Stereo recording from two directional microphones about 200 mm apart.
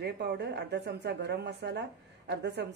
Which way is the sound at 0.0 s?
55° right (ahead or behind).